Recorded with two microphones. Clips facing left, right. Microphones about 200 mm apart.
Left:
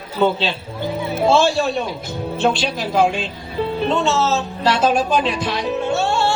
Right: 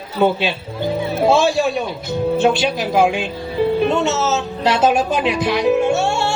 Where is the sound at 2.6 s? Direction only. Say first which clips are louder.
Right 2 dB; 15° right (ahead or behind).